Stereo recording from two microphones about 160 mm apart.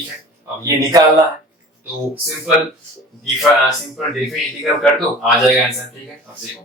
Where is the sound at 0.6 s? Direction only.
20° right (ahead or behind).